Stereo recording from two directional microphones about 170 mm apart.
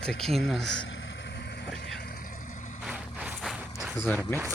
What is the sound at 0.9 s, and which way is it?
Vehicle, 90° left.